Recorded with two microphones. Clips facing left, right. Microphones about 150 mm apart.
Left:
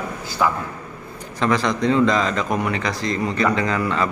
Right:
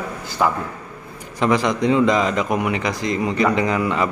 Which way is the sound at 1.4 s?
15° right (ahead or behind).